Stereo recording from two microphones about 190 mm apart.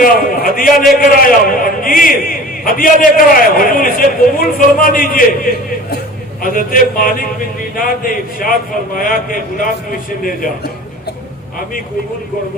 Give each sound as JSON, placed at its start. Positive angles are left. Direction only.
{"t": 0.0, "sound": "a man's voice", "side_deg": 50}
{"t": 6.4, "sound": "a man's voice", "side_deg": 50}